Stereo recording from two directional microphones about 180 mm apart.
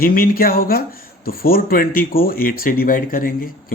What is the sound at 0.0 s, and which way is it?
Speech, 55° left (ahead or behind).